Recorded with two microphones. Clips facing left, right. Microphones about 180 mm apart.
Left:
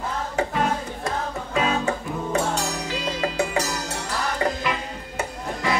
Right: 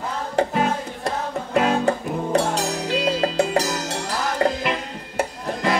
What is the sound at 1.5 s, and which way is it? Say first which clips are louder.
Music: right 4 dB; 55° right (ahead or behind).